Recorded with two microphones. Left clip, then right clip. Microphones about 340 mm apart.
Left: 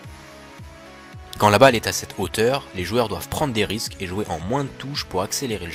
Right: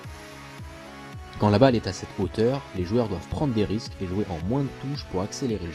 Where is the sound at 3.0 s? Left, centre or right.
Left.